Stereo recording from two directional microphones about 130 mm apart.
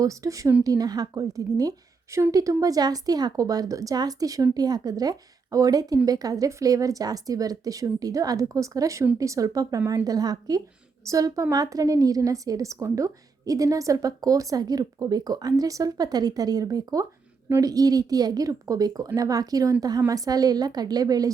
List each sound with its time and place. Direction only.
0.0 s a woman's voice: 25° right (ahead or behind)